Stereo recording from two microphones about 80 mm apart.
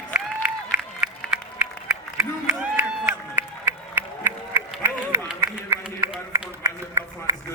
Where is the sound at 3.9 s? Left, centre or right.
Right.